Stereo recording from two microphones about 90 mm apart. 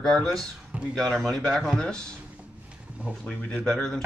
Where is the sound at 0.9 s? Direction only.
5° left (ahead or behind).